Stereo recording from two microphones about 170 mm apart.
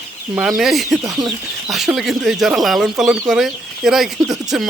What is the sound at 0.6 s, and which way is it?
Speech, centre (ahead or behind).